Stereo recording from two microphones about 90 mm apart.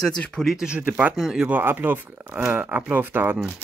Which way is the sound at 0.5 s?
10° right (ahead or behind).